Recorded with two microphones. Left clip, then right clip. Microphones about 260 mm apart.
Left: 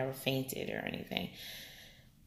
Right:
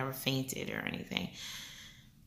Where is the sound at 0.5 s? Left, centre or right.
Centre.